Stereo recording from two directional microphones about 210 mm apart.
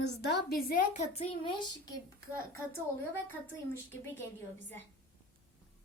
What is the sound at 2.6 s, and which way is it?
Speech, 10° left (ahead or behind).